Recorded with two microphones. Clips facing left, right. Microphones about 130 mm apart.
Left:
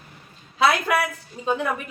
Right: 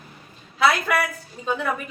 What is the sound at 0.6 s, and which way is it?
A woman's voice, 20° left (ahead or behind).